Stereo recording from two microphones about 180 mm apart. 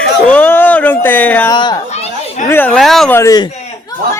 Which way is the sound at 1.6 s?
25° left (ahead or behind).